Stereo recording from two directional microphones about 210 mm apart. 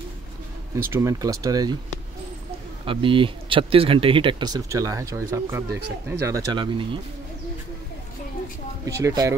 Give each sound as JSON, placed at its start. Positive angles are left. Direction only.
{"t": 0.8, "sound": "speech", "side_deg": -15}
{"t": 2.8, "sound": "speech", "side_deg": -25}
{"t": 8.8, "sound": "speech", "side_deg": -15}